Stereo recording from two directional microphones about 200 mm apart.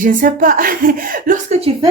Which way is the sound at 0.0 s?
40° right (ahead or behind).